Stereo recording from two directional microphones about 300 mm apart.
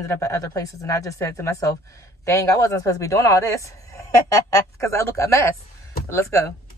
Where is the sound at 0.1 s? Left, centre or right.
Centre.